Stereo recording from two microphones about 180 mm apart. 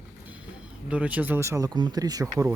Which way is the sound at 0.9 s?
5° right (ahead or behind).